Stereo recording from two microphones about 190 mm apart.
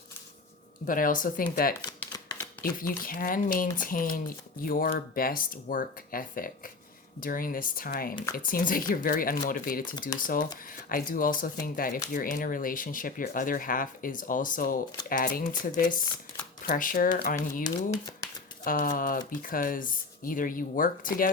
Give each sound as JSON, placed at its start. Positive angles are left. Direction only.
{"t": 0.9, "sound": "speech", "side_deg": 45}
{"t": 2.1, "sound": "shuffling cards", "side_deg": 20}
{"t": 2.6, "sound": "speech", "side_deg": 50}
{"t": 17.6, "sound": "speech", "side_deg": 20}
{"t": 18.6, "sound": "speech", "side_deg": 45}